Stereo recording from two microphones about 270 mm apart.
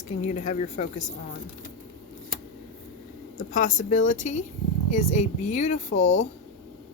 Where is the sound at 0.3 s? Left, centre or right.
Left.